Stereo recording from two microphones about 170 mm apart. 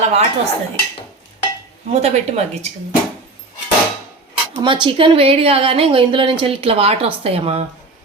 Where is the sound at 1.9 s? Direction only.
40° right (ahead or behind).